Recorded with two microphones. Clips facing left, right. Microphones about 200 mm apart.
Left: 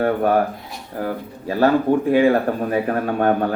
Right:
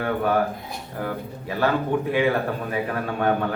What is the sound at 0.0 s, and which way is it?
A man's voice, 40° left (ahead or behind).